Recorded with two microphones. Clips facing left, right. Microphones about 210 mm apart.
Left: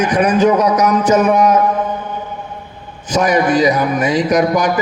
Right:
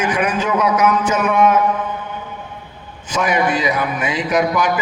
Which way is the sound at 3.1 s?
40° left (ahead or behind).